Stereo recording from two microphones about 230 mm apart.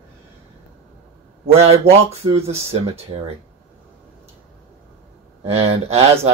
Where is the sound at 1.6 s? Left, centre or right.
Right.